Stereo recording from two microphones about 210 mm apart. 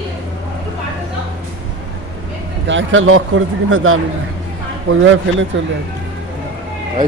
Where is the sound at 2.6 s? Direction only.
65° right (ahead or behind).